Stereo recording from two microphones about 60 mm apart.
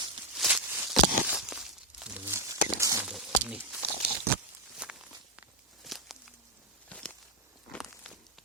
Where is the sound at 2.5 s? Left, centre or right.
Right.